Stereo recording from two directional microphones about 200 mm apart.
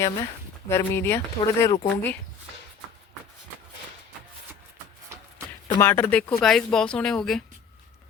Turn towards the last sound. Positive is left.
turn(degrees=5)  # may be behind; listen again after turning